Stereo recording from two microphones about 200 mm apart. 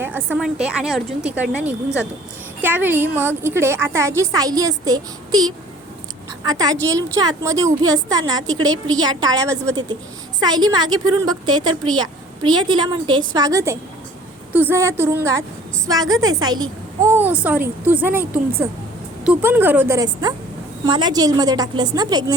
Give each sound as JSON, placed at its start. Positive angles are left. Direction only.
{"t": 0.0, "sound": "a woman's voice", "side_deg": -10}